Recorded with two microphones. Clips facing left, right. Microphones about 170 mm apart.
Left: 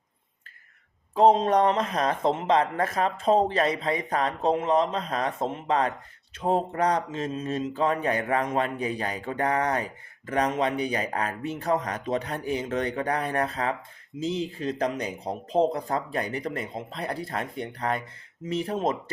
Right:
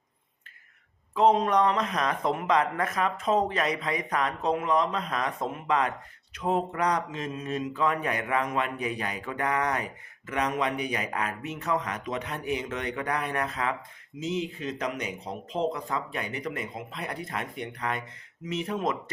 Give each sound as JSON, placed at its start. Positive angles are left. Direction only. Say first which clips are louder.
{"t": 1.1, "sound": "speech", "louder": "left 3 dB", "side_deg": 30}